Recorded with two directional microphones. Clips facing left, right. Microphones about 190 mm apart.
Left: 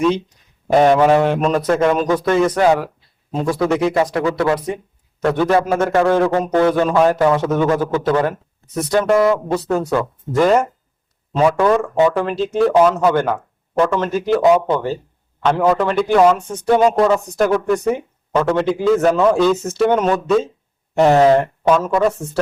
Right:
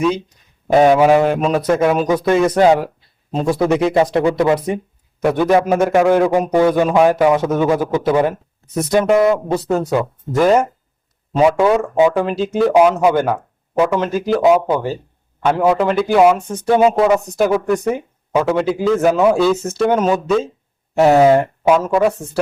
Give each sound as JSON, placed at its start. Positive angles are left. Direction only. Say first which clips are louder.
{"t": 0.7, "sound": "a man's voice", "louder": "right 1 dB", "side_deg": -5}
{"t": 9.9, "sound": "a man's voice", "louder": "right 1 dB", "side_deg": -5}